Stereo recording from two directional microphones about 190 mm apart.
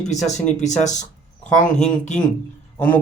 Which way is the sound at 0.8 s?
40° left (ahead or behind).